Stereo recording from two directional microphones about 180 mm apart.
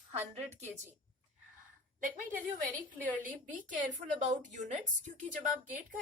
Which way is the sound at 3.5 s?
45° right (ahead or behind).